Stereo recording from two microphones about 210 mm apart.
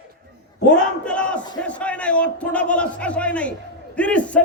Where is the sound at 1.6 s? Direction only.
5° left (ahead or behind).